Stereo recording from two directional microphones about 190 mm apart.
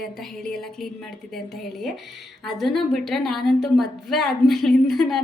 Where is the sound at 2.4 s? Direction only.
Centre (ahead or behind).